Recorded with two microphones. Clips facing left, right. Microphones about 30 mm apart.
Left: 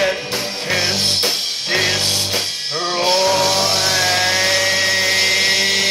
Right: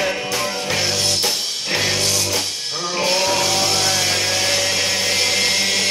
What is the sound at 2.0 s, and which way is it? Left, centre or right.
Music, left.